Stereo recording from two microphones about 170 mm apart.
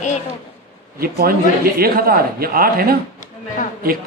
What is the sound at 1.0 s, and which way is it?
A man's voice, 60° right (ahead or behind).